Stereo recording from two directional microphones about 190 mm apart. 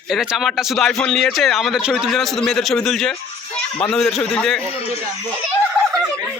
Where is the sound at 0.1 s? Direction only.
Centre (ahead or behind).